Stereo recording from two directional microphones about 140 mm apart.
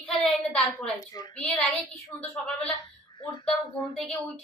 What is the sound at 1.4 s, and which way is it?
Speech, 10° left (ahead or behind).